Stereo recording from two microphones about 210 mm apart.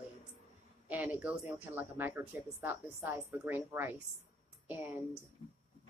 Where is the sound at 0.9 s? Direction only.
5° right (ahead or behind).